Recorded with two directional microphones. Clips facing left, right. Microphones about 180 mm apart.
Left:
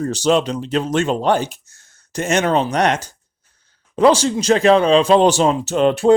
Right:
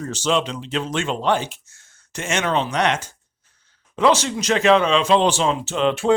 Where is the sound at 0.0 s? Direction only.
40° left (ahead or behind).